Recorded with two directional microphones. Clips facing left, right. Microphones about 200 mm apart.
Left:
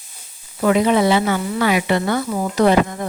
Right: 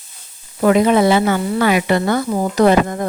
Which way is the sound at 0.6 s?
50° right (ahead or behind).